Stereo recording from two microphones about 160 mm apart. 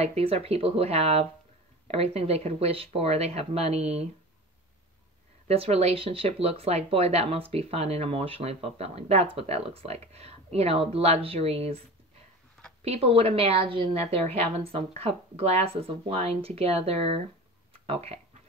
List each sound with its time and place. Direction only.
0.0 s speech: 40° right (ahead or behind)
5.5 s speech: 40° right (ahead or behind)
12.8 s speech: 40° right (ahead or behind)